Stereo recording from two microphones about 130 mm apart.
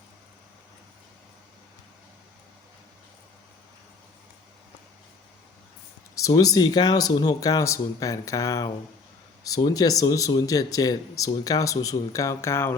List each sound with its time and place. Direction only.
6.1 s speech: 25° left (ahead or behind)